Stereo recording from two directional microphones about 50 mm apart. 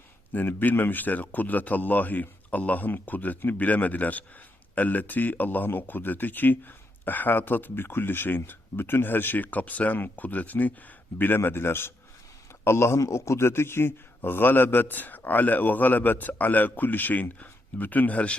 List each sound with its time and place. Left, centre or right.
0.3 s speech: left
11.2 s a man's voice: left
12.6 s speech: left